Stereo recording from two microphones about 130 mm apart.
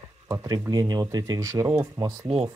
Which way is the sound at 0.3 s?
30° right (ahead or behind).